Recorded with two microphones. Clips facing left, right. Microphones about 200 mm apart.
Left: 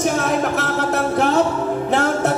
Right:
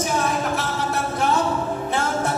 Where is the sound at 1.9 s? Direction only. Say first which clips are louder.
Left 6 dB; 70° left (ahead or behind).